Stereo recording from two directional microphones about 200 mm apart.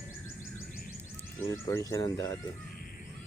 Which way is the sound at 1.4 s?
15° left (ahead or behind).